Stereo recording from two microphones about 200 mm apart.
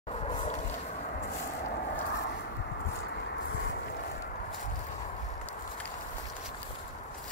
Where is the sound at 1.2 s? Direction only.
45° left (ahead or behind).